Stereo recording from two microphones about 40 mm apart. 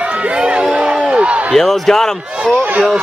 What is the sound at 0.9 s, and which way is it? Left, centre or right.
Slam, right.